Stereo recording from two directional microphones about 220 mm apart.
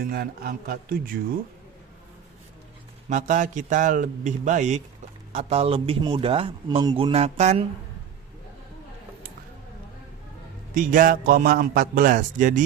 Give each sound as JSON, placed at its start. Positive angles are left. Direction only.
{"t": 0.1, "sound": "a man's voice", "side_deg": -45}
{"t": 3.1, "sound": "a man's voice", "side_deg": -35}
{"t": 10.8, "sound": "a man's voice", "side_deg": -40}